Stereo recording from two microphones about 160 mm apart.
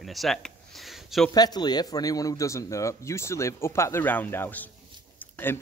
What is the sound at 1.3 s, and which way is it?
Speech, 25° left (ahead or behind).